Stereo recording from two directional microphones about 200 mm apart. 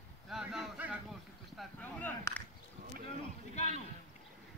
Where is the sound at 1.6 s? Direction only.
10° left (ahead or behind).